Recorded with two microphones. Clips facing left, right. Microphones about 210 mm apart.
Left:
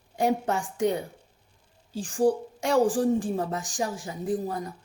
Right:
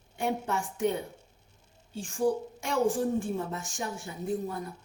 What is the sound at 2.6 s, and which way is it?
A woman's voice, 90° left.